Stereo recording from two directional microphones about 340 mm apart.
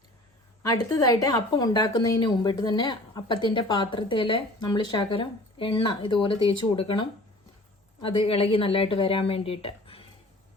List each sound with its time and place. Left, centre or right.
0.6 s a woman's voice: centre